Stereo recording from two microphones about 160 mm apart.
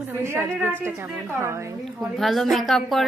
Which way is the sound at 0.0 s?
15° right (ahead or behind).